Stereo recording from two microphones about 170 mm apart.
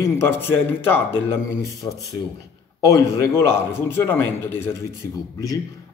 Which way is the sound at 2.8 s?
15° left (ahead or behind).